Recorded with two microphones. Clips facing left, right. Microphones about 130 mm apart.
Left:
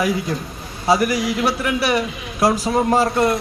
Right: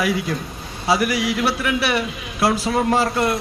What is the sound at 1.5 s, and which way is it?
A man's voice, 25° left (ahead or behind).